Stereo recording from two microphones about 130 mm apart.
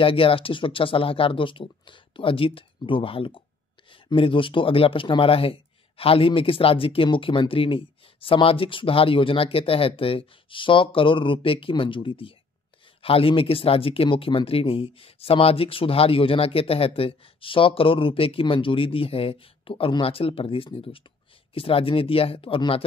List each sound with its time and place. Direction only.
0.0 s speech: 45° left (ahead or behind)